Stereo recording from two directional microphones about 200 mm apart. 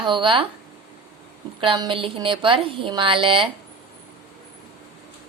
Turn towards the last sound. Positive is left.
turn(degrees=-25)  # may be behind; listen again after turning